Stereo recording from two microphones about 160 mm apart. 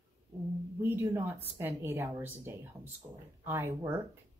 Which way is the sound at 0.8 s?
15° right (ahead or behind).